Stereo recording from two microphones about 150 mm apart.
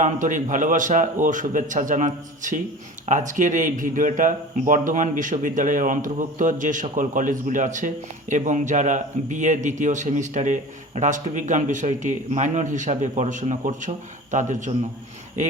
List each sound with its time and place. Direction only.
0.0 s a man's voice: 60° right (ahead or behind)